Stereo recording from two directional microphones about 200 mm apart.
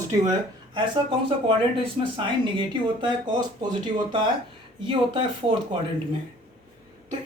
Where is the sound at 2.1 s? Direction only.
25° right (ahead or behind).